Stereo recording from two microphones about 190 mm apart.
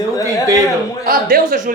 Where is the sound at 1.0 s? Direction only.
50° right (ahead or behind).